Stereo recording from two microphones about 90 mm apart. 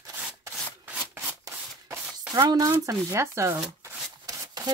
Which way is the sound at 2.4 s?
40° right (ahead or behind).